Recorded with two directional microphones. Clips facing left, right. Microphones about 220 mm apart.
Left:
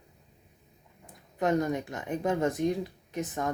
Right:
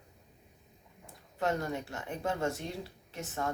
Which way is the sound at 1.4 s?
15° left (ahead or behind).